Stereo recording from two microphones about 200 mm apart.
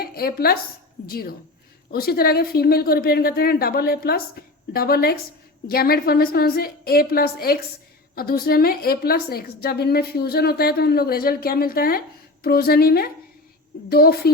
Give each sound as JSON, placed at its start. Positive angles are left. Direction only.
{"t": 0.0, "sound": "a woman's voice", "side_deg": 50}